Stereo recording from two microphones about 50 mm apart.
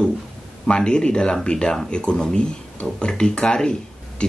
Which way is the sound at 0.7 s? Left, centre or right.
Centre.